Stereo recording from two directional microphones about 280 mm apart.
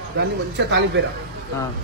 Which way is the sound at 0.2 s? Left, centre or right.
Right.